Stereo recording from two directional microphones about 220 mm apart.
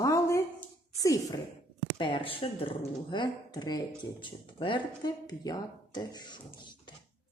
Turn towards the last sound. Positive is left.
turn(degrees=20)  # may be behind; listen again after turning